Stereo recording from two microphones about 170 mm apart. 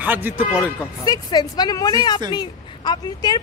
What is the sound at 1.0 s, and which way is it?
A woman's voice, 25° left (ahead or behind).